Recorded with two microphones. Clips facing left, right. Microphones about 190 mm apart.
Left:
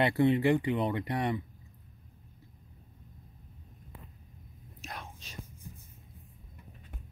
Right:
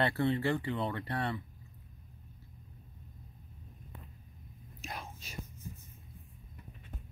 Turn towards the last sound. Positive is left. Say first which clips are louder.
# even
turn(degrees=-5)  # may be behind; listen again after turning